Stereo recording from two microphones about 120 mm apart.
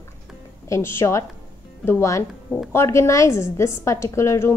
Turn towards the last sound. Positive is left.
turn(degrees=25)  # may be behind; listen again after turning